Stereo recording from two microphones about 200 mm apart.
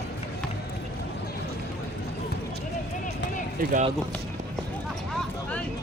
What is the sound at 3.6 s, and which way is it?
Speech, 45° right (ahead or behind).